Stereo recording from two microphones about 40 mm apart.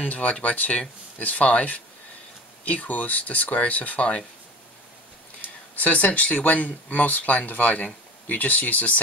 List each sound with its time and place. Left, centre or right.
0.2 s speech: left
5.8 s speech: left